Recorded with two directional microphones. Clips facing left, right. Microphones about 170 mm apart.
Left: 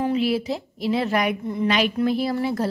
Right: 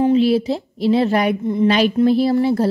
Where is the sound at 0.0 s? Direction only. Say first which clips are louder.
Right 7 dB; 30° right (ahead or behind).